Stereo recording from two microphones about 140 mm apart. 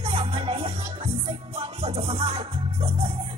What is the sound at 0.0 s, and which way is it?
Music, 45° right (ahead or behind).